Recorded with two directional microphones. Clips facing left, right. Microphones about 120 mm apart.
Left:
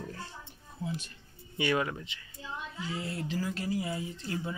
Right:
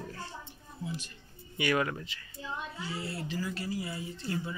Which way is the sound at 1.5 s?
25° left (ahead or behind).